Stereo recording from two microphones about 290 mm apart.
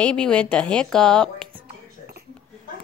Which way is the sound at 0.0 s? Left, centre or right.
Centre.